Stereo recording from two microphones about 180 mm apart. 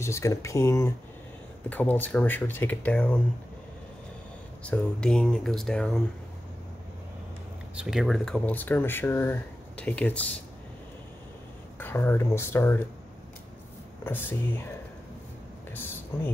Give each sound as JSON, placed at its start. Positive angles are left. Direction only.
{"t": 0.0, "sound": "speech", "side_deg": 15}
{"t": 4.6, "sound": "speech", "side_deg": 5}
{"t": 7.7, "sound": "speech", "side_deg": 0}
{"t": 11.8, "sound": "speech", "side_deg": 10}
{"t": 14.0, "sound": "speech", "side_deg": 10}
{"t": 16.1, "sound": "speech", "side_deg": 15}